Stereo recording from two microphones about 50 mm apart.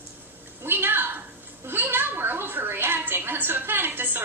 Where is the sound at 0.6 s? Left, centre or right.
Right.